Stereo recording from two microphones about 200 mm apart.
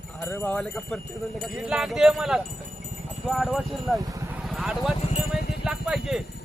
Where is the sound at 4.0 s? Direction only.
15° right (ahead or behind).